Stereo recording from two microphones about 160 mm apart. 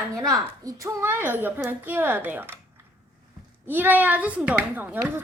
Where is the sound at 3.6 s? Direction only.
10° right (ahead or behind).